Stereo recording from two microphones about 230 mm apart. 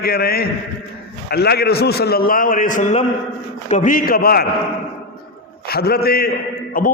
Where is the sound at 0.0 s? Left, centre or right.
Left.